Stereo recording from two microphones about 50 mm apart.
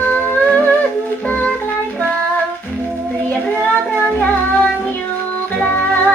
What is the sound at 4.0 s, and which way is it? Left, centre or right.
Music, left.